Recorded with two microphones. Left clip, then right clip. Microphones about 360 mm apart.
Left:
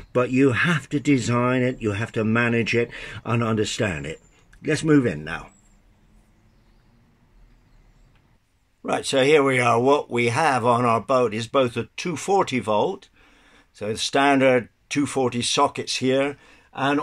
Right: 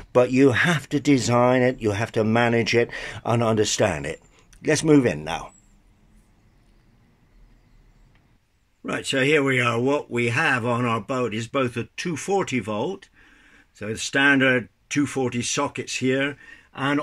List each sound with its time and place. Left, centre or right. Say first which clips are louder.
0.1 s speech: right 3 dB; centre
8.8 s speech: left 3 dB; centre